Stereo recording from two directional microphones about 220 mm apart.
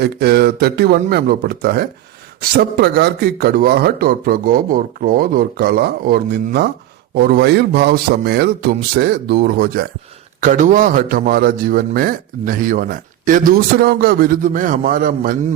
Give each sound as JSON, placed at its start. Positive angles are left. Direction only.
{"t": 0.0, "sound": "a man's voice", "side_deg": -45}